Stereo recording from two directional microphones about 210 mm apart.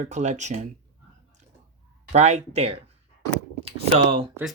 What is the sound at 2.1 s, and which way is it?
Speech, 30° right (ahead or behind).